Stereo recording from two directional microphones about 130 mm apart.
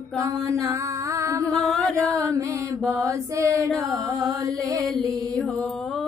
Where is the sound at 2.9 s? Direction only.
25° right (ahead or behind).